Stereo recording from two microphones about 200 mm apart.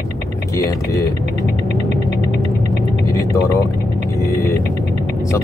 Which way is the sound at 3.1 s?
15° left (ahead or behind).